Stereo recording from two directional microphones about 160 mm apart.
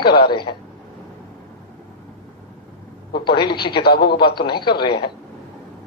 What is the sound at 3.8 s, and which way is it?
Speech, 85° left.